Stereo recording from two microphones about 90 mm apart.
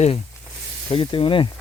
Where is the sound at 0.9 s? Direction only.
80° left.